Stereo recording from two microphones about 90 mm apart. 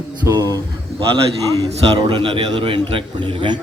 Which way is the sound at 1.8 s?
75° right (ahead or behind).